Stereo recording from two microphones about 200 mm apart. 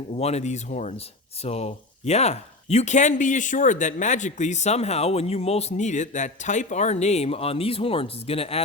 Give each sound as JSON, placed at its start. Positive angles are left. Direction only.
{"t": 0.1, "sound": "speech", "side_deg": 30}